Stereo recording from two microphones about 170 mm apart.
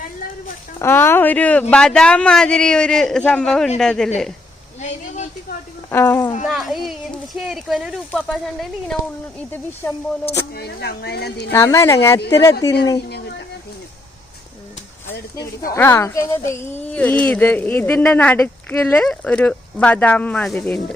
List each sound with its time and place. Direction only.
0.8 s speech: 15° left (ahead or behind)
4.8 s a sound: 45° left (ahead or behind)
5.9 s speech: 15° left (ahead or behind)
6.5 s speech: centre (ahead or behind)
10.5 s speech: 70° left (ahead or behind)
11.5 s speech: 15° left (ahead or behind)
15.1 s speech: 70° left (ahead or behind)
15.7 s speech: 15° left (ahead or behind)